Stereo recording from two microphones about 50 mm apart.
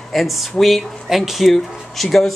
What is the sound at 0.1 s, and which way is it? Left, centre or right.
Speech, centre.